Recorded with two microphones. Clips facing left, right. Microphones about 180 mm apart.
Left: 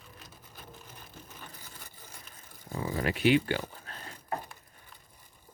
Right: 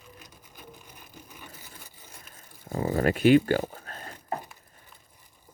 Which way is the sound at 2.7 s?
40° right (ahead or behind).